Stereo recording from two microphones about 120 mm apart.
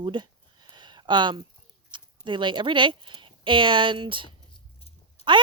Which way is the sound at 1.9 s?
40° right (ahead or behind).